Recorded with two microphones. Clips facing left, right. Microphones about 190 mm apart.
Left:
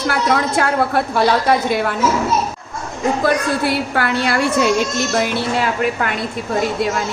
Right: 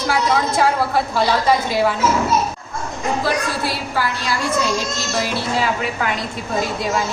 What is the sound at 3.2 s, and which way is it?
A woman's voice, 60° left (ahead or behind).